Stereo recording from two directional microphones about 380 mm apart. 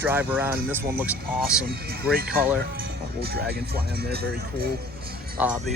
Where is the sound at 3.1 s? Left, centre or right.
Right.